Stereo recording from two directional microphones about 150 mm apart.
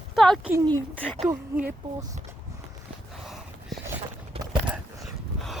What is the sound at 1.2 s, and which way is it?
Speech, 10° right (ahead or behind).